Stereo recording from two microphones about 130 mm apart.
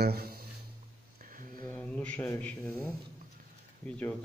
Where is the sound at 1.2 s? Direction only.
90° right.